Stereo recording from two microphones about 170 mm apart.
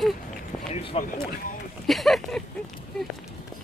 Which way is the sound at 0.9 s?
35° left (ahead or behind).